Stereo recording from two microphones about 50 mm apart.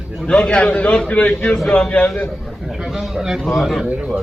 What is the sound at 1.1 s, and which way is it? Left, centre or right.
Speech, left.